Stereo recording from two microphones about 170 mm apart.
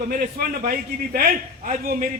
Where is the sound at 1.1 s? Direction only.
60° right (ahead or behind).